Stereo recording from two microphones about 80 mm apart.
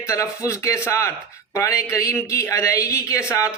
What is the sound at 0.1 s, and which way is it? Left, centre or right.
A man's voice, left.